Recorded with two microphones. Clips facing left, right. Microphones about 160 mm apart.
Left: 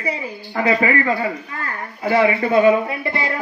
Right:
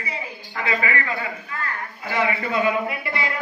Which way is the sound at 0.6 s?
35° left (ahead or behind).